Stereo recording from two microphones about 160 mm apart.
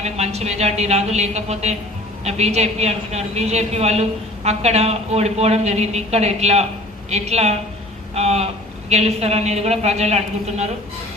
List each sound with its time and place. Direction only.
0.0 s a woman's voice: 40° right (ahead or behind)
8.1 s a sound: 40° right (ahead or behind)
8.9 s a woman's voice: 40° right (ahead or behind)